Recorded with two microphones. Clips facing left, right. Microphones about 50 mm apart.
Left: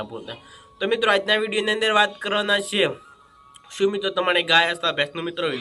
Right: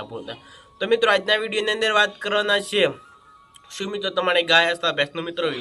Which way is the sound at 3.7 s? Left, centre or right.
Centre.